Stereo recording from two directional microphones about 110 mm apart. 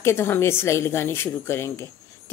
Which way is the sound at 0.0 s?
20° left (ahead or behind).